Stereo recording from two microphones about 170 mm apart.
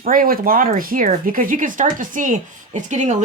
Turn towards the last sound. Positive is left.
turn(degrees=-45)  # may be behind; listen again after turning